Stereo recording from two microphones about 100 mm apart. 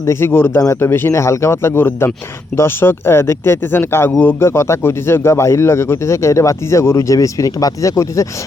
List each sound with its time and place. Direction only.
0.0 s speech: 25° left (ahead or behind)